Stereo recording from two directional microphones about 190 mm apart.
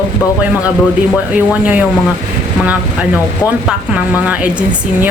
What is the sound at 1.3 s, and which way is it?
Speech, 10° right (ahead or behind).